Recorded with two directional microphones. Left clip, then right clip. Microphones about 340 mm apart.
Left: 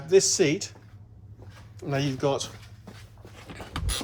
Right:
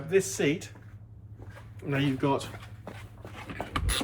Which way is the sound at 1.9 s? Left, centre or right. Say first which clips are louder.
Left 1 dB; centre.